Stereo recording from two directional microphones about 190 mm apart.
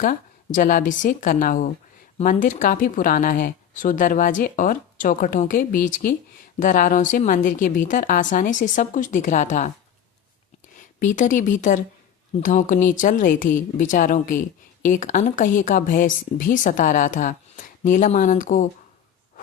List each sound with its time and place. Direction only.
0.0 s a woman's voice: 45° left (ahead or behind)
10.8 s a woman's voice: 40° left (ahead or behind)